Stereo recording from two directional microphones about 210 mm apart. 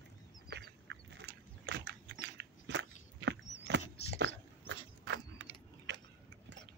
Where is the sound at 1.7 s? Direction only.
50° right (ahead or behind).